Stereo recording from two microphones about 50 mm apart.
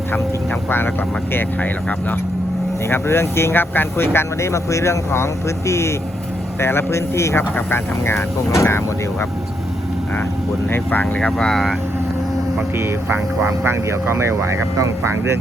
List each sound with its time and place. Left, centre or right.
2.9 s speech: left
6.6 s speech: left
7.5 s speech: left
11.0 s speech: centre
13.1 s speech: right
14.1 s speech: right